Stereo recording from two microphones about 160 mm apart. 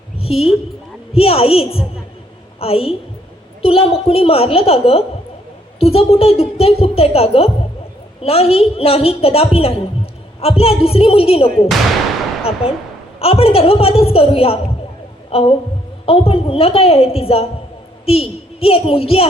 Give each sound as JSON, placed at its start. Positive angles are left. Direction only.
{"t": 0.2, "sound": "a woman's voice", "side_deg": 35}
{"t": 12.6, "sound": "a woman's voice", "side_deg": 35}